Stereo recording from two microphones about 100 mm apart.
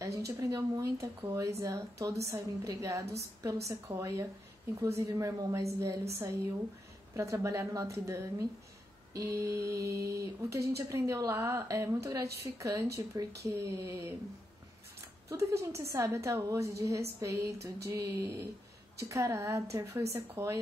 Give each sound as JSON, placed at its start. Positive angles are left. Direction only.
{"t": 0.0, "sound": "speech", "side_deg": -30}
{"t": 7.2, "sound": "speech", "side_deg": -30}
{"t": 15.2, "sound": "speech", "side_deg": -30}